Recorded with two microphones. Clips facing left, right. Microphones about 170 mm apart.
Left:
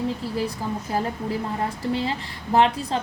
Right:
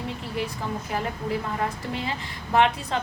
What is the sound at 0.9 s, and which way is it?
A woman's voice, 35° left (ahead or behind).